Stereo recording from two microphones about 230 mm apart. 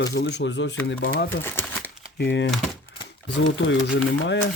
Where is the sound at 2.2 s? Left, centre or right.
Left.